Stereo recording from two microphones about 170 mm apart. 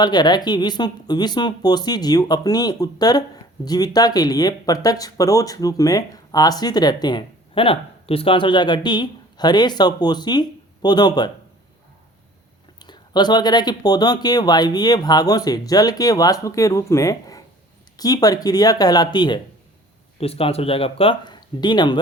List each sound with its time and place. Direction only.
0.0 s speech: 25° left (ahead or behind)
12.8 s speech: 25° left (ahead or behind)
20.1 s speech: 35° left (ahead or behind)